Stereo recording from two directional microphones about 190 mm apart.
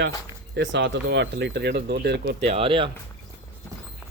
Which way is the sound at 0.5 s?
70° right (ahead or behind).